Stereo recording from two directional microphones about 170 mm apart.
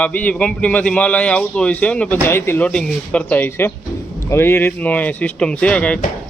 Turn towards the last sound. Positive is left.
turn(degrees=5)  # may be behind; listen again after turning